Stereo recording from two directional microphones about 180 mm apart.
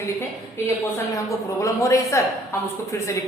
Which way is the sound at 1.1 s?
15° left (ahead or behind).